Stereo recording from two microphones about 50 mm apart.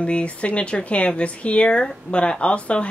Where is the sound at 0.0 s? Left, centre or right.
Left.